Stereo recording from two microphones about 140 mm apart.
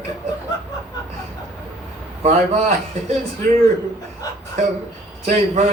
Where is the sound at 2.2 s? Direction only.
50° right (ahead or behind).